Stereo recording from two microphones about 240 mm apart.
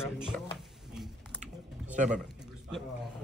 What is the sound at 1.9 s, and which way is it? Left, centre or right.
Speech, right.